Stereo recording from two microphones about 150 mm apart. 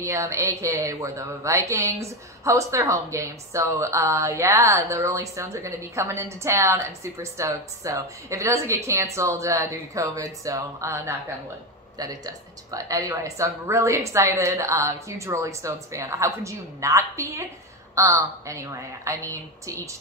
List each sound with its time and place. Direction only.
0.0 s speech: 20° right (ahead or behind)